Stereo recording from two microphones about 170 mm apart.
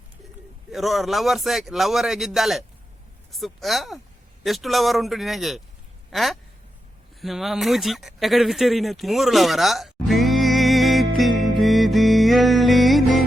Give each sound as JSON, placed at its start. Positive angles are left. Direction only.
{"t": 0.7, "sound": "speech", "side_deg": 0}
{"t": 11.2, "sound": "music", "side_deg": 0}